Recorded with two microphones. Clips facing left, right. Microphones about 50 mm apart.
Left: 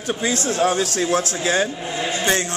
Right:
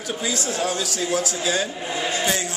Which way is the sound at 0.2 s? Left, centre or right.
Left.